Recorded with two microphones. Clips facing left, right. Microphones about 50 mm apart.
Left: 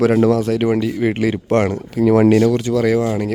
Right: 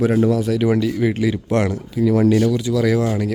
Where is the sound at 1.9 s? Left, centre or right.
Left.